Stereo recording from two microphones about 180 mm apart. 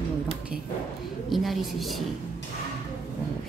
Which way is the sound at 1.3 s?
Centre (ahead or behind).